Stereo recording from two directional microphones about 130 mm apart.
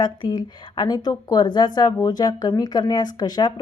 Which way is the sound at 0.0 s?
35° left (ahead or behind).